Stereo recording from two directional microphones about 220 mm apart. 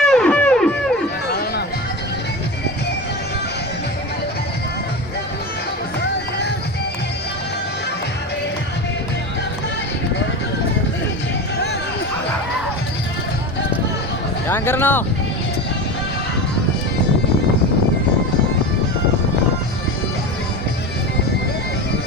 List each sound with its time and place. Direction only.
0.0 s music: 5° left (ahead or behind)
1.3 s music: 45° left (ahead or behind)
14.4 s a sound: 10° left (ahead or behind)